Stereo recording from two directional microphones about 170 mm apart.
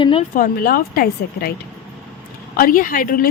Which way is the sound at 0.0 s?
30° left (ahead or behind).